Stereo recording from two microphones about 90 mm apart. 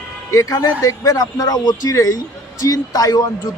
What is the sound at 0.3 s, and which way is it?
A man's voice, 40° left (ahead or behind).